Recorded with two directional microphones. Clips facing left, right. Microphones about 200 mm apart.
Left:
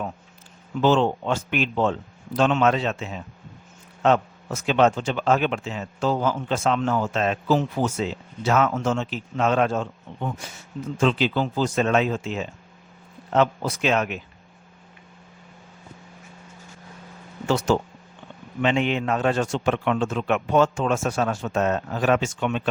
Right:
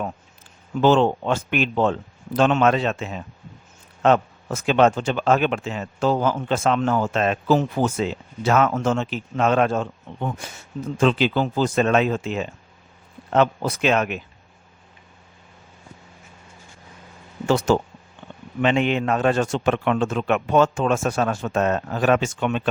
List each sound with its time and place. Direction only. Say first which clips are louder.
0.8 s speech: right 3 dB; 55° right (ahead or behind)
10.1 s a sound: right 2 dB; 60° right (ahead or behind)
11.0 s speech: right 2 dB; 60° right (ahead or behind)
17.4 s speech: right 3 dB; 50° right (ahead or behind)